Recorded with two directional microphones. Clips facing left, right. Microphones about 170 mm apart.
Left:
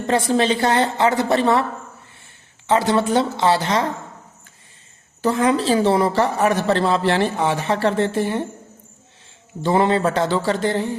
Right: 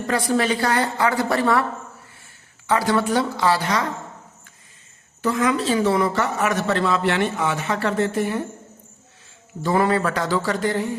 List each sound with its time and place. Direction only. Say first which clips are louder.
0.1 s a woman's voice: left 3 dB; 25° left (ahead or behind)
2.6 s a woman's voice: left 2 dB; 25° left (ahead or behind)
5.2 s a man's voice: left 3 dB; 30° left (ahead or behind)
9.6 s a woman's voice: left 2 dB; 25° left (ahead or behind)